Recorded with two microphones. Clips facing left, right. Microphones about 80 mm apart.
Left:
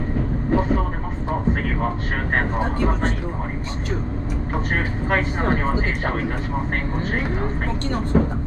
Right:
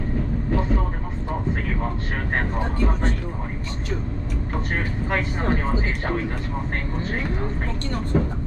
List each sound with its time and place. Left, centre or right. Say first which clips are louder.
0.5 s vehicle: left 5 dB; left
4.7 s a sound: left 3 dB; left
7.0 s speech: left 2 dB; left